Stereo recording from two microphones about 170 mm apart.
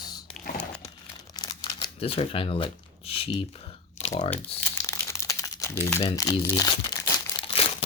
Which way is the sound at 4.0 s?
40° left (ahead or behind).